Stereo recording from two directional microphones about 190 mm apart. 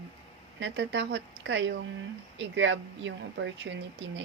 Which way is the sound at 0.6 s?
70° right (ahead or behind).